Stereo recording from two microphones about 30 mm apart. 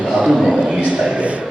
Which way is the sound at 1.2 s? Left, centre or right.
Right.